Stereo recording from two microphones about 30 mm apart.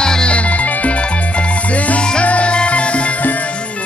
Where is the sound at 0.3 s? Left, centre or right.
Left.